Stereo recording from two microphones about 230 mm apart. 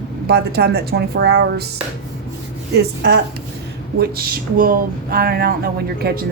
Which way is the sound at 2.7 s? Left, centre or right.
Right.